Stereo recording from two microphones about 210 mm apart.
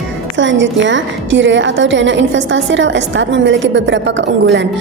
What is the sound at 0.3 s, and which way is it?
A woman's voice, 60° right (ahead or behind).